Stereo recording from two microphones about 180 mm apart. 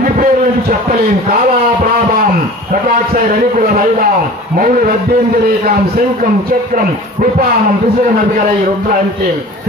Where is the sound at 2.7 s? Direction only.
50° right (ahead or behind).